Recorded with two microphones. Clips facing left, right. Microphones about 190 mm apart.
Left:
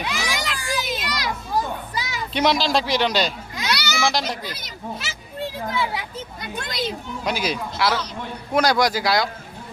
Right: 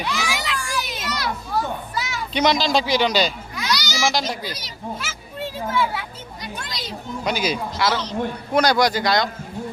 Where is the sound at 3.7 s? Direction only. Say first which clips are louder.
Even; 60° left (ahead or behind).